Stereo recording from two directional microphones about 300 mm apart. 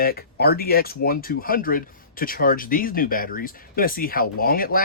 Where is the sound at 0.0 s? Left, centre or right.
Left.